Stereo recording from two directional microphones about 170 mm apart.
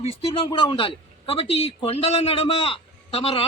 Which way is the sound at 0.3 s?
30° left (ahead or behind).